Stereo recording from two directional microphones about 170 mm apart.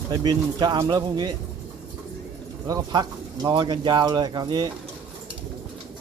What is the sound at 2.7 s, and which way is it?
Speech, 20° right (ahead or behind).